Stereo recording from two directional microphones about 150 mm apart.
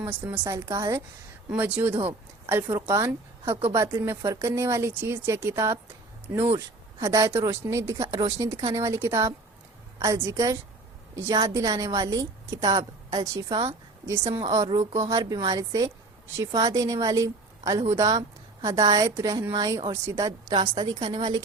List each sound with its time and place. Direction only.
0.0 s a woman's voice: 15° right (ahead or behind)
3.5 s a woman's voice: 40° right (ahead or behind)
3.8 s a woman's voice: 20° right (ahead or behind)